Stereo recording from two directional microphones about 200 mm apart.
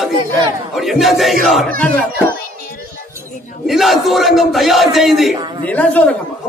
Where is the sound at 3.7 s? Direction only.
Centre (ahead or behind).